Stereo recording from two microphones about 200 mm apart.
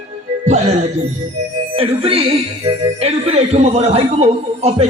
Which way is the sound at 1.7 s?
30° right (ahead or behind).